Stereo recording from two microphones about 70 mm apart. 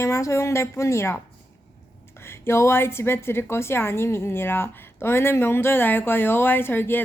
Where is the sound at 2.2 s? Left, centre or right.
Left.